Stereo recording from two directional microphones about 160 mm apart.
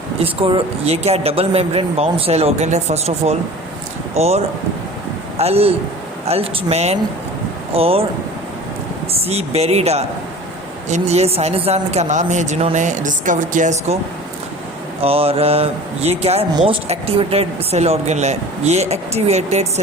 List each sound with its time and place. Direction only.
0.2 s speech: 35° right (ahead or behind)
9.2 s a woman's voice: 40° right (ahead or behind)
15.0 s a woman's voice: 35° right (ahead or behind)